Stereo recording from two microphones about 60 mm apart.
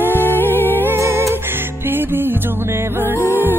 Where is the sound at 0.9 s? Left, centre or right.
Right.